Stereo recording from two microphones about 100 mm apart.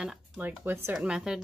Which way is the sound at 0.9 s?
5° right (ahead or behind).